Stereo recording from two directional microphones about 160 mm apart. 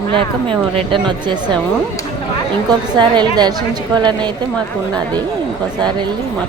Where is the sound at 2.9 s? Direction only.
25° right (ahead or behind).